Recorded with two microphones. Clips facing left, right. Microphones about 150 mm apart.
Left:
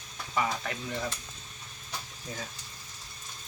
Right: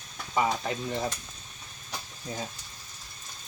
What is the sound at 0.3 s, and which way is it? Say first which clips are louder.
Speech: right 4 dB; 25° right (ahead or behind).